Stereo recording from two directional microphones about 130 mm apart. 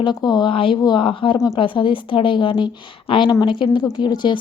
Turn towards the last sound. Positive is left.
turn(degrees=35)  # may be behind; listen again after turning